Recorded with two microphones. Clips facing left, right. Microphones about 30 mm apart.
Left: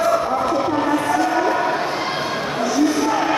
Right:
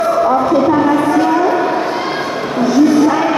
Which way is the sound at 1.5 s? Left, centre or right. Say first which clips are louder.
Right 5 dB; centre.